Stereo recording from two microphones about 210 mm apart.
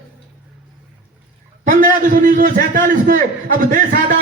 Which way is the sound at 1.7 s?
40° right (ahead or behind).